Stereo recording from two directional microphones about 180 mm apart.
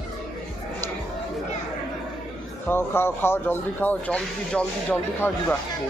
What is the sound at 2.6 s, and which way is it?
Speech, 15° left (ahead or behind).